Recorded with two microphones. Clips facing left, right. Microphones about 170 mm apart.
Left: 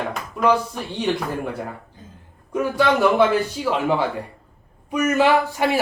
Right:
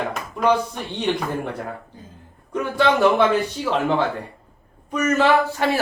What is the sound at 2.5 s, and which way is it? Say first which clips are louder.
A man's voice: even; 5° left (ahead or behind).